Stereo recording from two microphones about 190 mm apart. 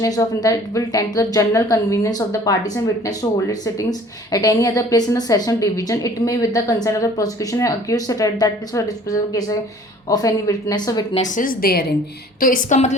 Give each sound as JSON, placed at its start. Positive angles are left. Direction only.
{"t": 0.0, "sound": "a woman's voice", "side_deg": 20}
{"t": 11.2, "sound": "a woman's voice", "side_deg": 45}